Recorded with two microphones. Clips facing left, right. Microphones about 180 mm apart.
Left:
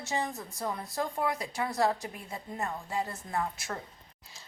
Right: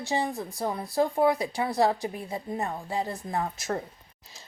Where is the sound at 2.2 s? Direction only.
15° right (ahead or behind).